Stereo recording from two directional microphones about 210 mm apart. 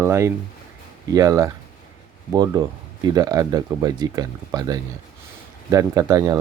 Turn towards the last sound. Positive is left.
turn(degrees=-15)  # may be behind; listen again after turning